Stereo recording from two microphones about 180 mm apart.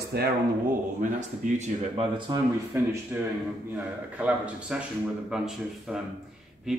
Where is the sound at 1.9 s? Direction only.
20° right (ahead or behind).